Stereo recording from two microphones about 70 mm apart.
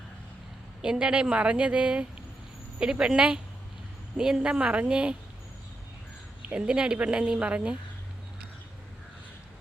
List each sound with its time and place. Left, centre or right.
0.8 s speech: centre
6.5 s speech: centre